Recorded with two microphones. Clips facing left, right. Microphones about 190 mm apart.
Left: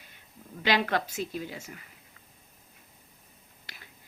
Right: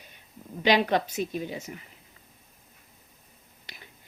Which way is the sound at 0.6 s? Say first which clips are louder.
Right 4 dB; 20° right (ahead or behind).